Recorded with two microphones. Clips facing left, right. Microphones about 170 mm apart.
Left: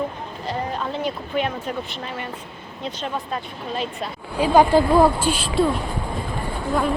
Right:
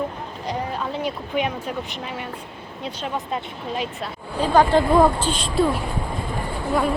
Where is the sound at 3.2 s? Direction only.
20° right (ahead or behind).